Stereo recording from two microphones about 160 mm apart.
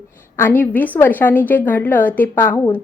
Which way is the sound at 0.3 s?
15° left (ahead or behind).